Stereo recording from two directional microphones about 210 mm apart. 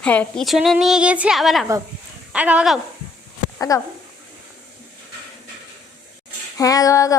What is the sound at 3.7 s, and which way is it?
Female singing, 15° left (ahead or behind).